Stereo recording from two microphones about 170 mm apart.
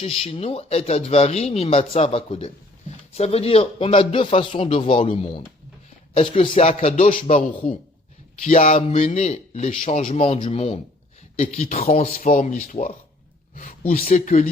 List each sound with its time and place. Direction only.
0.0 s speech: 35° left (ahead or behind)
13.6 s speech: 55° left (ahead or behind)